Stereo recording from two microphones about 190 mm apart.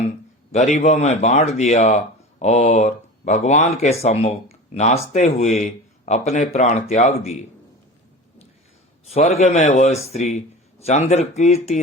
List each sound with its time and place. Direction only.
0.5 s speech: 35° left (ahead or behind)
9.1 s speech: 35° left (ahead or behind)